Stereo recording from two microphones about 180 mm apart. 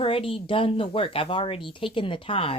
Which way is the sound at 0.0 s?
30° left (ahead or behind).